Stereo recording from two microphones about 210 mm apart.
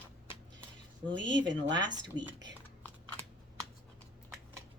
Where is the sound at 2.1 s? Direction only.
20° right (ahead or behind).